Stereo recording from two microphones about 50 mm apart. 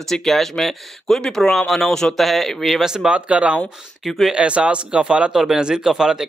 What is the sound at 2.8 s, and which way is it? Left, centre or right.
Speech, centre.